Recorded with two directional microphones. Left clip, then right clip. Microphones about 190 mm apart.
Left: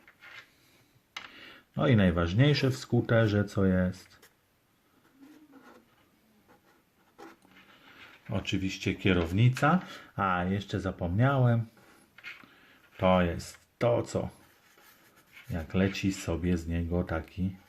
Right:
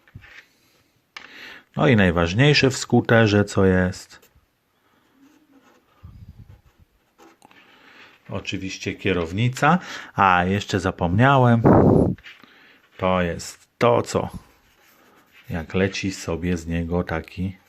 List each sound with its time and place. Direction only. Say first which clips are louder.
1.3 s speech: right 9 dB; 25° right (ahead or behind)
7.9 s speech: right 4 dB; 20° right (ahead or behind); by 11.6 s 40° right (ahead or behind)
12.5 s speech: right 7 dB; 25° right (ahead or behind); by 14.3 s 45° right (ahead or behind)
15.4 s speech: right 8 dB; 35° right (ahead or behind)